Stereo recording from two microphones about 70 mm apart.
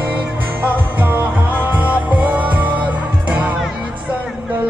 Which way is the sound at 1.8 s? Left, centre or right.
Centre.